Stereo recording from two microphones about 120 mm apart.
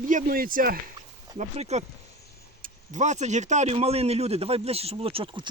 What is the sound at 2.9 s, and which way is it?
A man's voice, 80° right.